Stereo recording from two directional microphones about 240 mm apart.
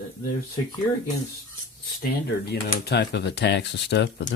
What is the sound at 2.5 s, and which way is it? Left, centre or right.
Speech, left.